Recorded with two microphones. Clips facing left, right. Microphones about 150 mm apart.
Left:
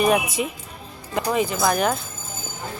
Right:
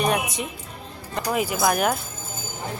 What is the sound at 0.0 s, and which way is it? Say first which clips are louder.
A woman's voice: left 4 dB; 5° left (ahead or behind).